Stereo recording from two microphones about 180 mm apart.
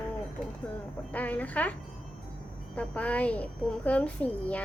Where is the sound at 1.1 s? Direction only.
10° left (ahead or behind).